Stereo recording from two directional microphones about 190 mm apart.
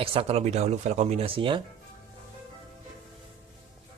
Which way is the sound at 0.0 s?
30° right (ahead or behind).